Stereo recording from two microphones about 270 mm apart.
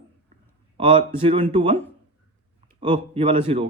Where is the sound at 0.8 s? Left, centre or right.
Centre.